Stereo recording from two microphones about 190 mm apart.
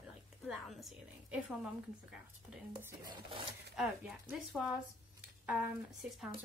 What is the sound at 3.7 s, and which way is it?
A woman's voice, 5° right (ahead or behind).